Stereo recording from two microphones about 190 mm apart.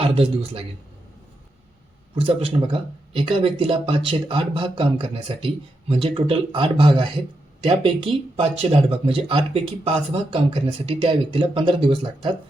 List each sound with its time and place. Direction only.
0.0 s speech: 30° right (ahead or behind)
2.1 s speech: 30° right (ahead or behind)